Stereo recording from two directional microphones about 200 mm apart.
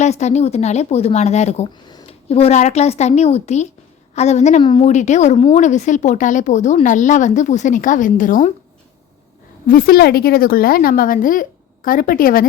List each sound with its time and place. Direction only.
0.0 s speech: 35° left (ahead or behind)
9.6 s a woman's voice: 45° left (ahead or behind)